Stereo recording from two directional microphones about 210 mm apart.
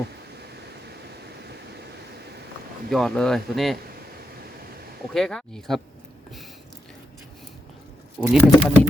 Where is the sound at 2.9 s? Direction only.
Centre (ahead or behind).